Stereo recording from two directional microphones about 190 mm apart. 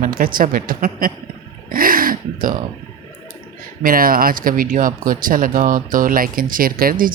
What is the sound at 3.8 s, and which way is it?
Speech, 50° right (ahead or behind).